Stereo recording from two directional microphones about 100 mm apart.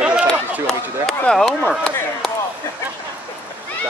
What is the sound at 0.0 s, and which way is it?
Run, 10° right (ahead or behind).